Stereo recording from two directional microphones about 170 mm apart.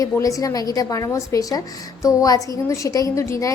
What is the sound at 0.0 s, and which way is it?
A woman's voice, 20° left (ahead or behind).